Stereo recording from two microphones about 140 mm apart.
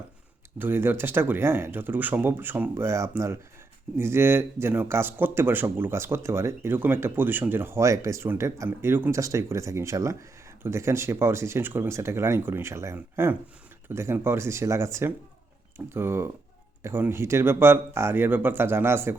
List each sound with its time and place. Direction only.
0.6 s speech: 15° right (ahead or behind)